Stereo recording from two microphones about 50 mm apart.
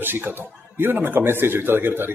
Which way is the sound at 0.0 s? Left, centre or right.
Right.